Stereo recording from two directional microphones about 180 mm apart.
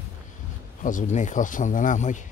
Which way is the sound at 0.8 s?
45° left (ahead or behind).